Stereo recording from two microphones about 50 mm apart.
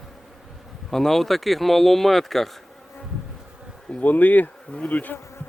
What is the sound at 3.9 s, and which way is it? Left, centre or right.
Speech, left.